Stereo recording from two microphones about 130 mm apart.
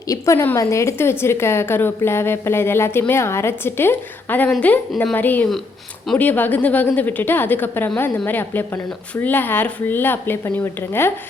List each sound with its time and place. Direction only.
0.1 s a woman's voice: 20° left (ahead or behind)